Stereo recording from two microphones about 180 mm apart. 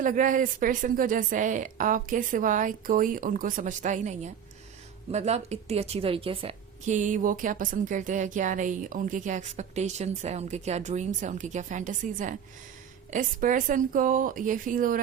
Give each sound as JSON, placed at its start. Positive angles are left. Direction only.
{"t": 0.0, "sound": "a woman's voice", "side_deg": -45}